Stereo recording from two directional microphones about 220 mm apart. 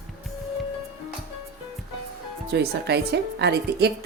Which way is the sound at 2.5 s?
50° right (ahead or behind).